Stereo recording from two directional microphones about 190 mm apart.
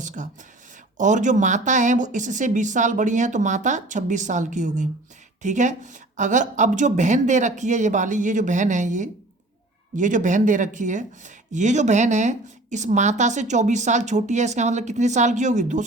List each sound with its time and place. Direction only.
0.2 s speech: 40° right (ahead or behind)